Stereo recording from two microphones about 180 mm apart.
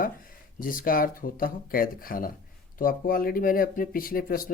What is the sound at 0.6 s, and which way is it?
Speech, 50° left (ahead or behind).